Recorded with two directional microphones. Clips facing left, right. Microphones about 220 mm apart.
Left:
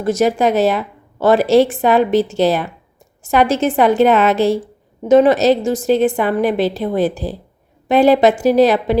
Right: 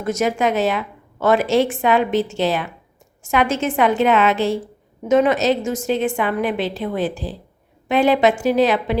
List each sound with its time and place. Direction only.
0.0 s a woman's voice: 35° left (ahead or behind)